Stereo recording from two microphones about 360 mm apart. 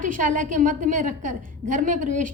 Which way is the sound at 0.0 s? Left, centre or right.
Right.